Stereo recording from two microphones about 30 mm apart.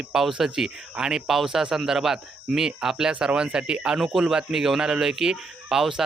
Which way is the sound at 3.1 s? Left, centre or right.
Right.